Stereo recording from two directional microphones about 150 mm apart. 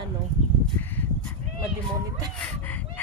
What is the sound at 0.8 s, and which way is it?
Crow, 15° left (ahead or behind).